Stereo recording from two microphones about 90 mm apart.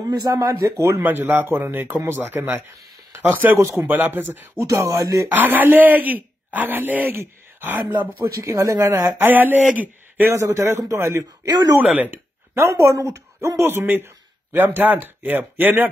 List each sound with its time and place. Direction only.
0.1 s speech: 45° right (ahead or behind); by 4.6 s 25° right (ahead or behind)
4.6 s speech: 40° right (ahead or behind)
5.3 s speech: 20° right (ahead or behind)
8.2 s speech: 35° right (ahead or behind)
9.2 s speech: 20° right (ahead or behind)
10.3 s speech: 35° right (ahead or behind)
11.4 s speech: 45° right (ahead or behind)
11.7 s speech: 15° right (ahead or behind)
12.5 s speech: 35° right (ahead or behind)